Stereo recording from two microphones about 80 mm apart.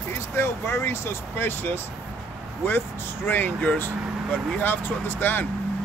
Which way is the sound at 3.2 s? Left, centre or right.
Left.